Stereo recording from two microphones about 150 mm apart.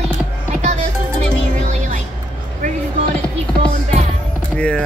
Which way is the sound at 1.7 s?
50° right (ahead or behind).